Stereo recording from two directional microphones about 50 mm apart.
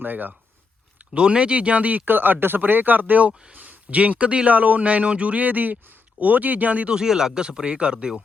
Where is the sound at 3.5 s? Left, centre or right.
Right.